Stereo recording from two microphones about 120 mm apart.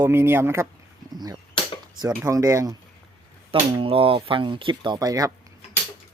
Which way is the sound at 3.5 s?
50° right (ahead or behind).